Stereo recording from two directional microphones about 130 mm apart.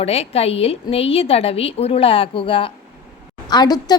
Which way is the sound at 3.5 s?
30° left (ahead or behind).